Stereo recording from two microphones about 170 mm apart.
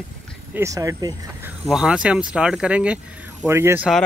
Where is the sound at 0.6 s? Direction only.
20° right (ahead or behind).